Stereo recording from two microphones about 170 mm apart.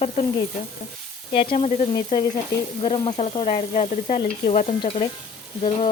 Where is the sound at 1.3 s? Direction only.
35° left (ahead or behind).